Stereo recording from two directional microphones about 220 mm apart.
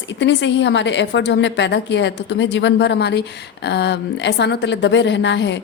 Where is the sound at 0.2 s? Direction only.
55° left (ahead or behind).